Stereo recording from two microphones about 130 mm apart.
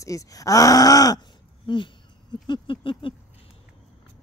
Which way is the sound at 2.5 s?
40° left (ahead or behind).